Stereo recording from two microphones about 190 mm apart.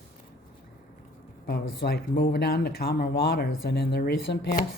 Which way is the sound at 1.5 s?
55° left (ahead or behind).